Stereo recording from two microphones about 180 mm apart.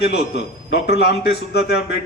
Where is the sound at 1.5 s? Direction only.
65° left (ahead or behind).